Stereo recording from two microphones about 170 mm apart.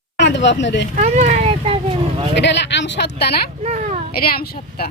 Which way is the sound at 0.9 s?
40° right (ahead or behind).